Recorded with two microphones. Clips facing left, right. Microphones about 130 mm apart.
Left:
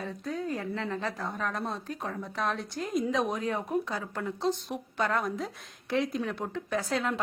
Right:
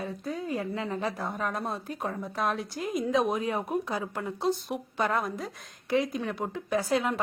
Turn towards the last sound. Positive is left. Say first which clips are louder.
# right 3 dB
turn(degrees=-10)  # may be behind; listen again after turning